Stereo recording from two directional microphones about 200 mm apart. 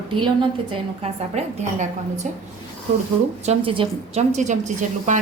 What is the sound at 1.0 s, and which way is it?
A woman's voice, 30° right (ahead or behind).